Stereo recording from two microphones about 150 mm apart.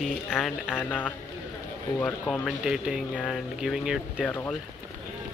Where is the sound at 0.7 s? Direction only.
10° left (ahead or behind).